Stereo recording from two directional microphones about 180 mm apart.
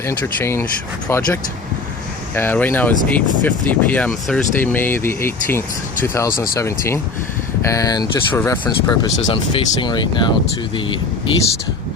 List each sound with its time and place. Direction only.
0.0 s speech: 15° left (ahead or behind)